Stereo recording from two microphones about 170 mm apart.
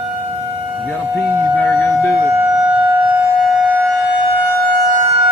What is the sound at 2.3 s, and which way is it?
Civil defense siren, 5° right (ahead or behind).